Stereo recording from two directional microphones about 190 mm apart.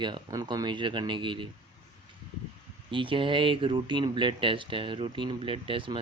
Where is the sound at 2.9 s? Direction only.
25° right (ahead or behind).